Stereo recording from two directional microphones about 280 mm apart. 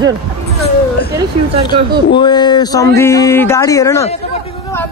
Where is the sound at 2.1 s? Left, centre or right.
Centre.